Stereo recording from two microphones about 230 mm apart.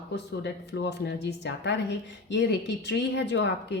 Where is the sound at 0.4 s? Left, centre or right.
Left.